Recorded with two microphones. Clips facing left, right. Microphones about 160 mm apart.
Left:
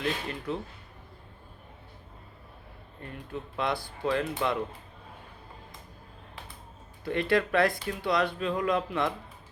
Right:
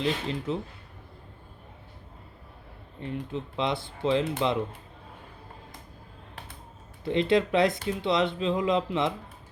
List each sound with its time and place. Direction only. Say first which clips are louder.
0.0 s speech: right 3 dB; 20° right (ahead or behind)
3.0 s speech: right 6 dB; 20° right (ahead or behind)
7.0 s speech: right 3 dB; 20° right (ahead or behind)